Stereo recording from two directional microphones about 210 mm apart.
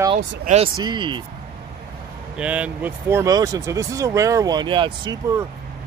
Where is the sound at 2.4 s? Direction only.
5° right (ahead or behind).